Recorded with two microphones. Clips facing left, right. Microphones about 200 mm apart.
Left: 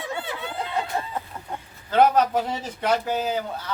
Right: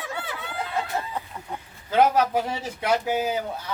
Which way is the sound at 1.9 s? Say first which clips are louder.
Left 1 dB; 10° right (ahead or behind).